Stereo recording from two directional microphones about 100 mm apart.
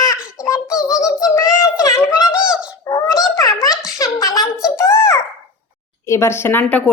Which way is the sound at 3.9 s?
35° left (ahead or behind).